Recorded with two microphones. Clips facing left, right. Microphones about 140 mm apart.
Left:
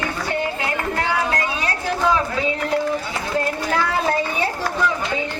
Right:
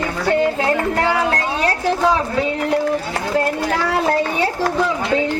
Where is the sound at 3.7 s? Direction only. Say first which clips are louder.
Left 1 dB; 80° right.